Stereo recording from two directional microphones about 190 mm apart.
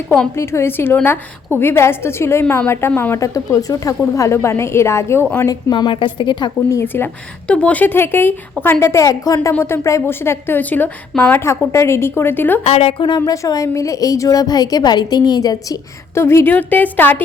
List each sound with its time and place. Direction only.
0.1 s a woman's voice: 10° left (ahead or behind)
12.6 s speech: 30° left (ahead or behind); by 17.2 s 10° left (ahead or behind)